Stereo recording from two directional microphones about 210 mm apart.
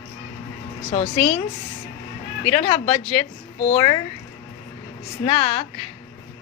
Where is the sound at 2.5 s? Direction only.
30° left (ahead or behind).